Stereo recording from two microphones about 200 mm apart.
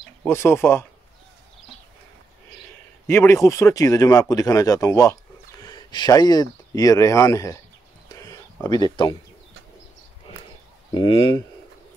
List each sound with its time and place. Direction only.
0.2 s speech: 10° left (ahead or behind)
3.1 s speech: 15° left (ahead or behind)
8.1 s a sound: 15° left (ahead or behind)
11.0 s speech: 25° left (ahead or behind)